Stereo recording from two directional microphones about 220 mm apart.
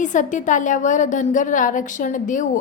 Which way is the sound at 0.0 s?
35° left (ahead or behind).